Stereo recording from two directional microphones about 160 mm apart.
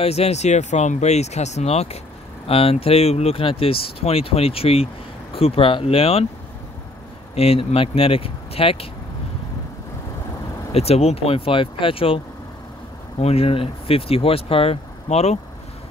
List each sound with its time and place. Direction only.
0.0 s speech: 40° left (ahead or behind)
7.3 s speech: 35° left (ahead or behind)
10.7 s speech: 40° left (ahead or behind)
13.2 s speech: 40° left (ahead or behind)